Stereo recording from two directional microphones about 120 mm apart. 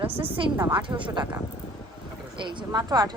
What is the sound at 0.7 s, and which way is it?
Speech, 40° right (ahead or behind).